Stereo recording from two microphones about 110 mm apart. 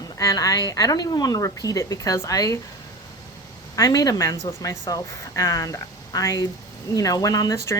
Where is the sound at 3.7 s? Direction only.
35° left (ahead or behind).